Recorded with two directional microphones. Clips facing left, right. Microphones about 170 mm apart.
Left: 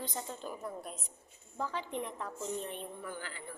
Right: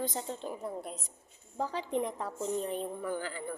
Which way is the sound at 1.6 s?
35° right (ahead or behind).